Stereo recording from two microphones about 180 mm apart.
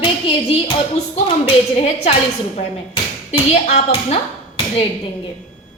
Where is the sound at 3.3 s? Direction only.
35° left (ahead or behind).